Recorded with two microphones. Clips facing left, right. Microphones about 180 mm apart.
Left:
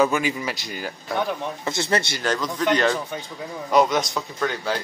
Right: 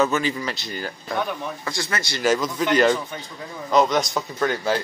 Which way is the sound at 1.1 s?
25° left (ahead or behind).